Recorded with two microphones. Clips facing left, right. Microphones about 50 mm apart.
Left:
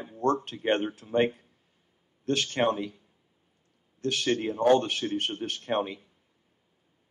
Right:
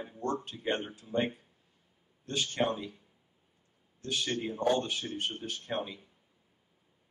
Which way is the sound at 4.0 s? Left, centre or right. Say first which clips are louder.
Left 6 dB; left.